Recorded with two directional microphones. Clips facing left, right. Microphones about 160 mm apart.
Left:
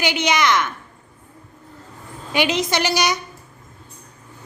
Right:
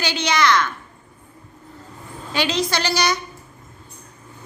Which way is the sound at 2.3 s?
20° left (ahead or behind).